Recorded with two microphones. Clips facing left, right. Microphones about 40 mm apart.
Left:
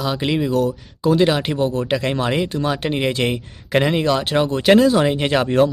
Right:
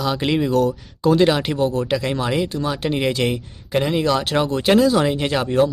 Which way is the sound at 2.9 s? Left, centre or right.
Left.